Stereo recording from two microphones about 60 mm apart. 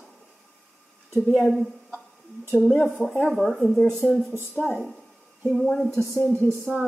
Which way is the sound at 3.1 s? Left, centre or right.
Centre.